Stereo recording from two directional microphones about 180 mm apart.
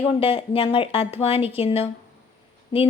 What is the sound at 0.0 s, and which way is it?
A woman's voice, 30° left (ahead or behind).